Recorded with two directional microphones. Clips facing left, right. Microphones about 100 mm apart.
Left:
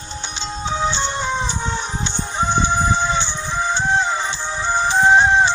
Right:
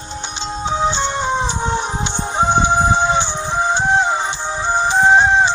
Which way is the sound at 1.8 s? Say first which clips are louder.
Right 4 dB; 50° right (ahead or behind).